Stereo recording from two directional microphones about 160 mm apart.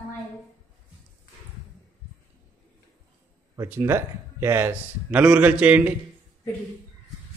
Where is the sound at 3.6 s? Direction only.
15° right (ahead or behind).